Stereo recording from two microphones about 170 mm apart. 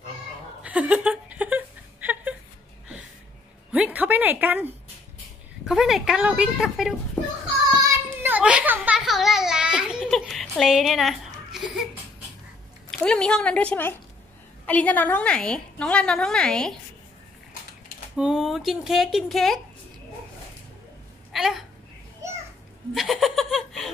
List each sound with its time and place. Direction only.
0.6 s a sound: 5° right (ahead or behind)
3.7 s a woman's voice: 10° right (ahead or behind)
5.7 s a woman's voice: centre (ahead or behind)
7.8 s child singing: 10° right (ahead or behind)
13.0 s a woman's voice: 5° left (ahead or behind)
18.1 s a woman's voice: 5° right (ahead or behind)
21.3 s a woman's voice: centre (ahead or behind)
22.9 s laughter: centre (ahead or behind)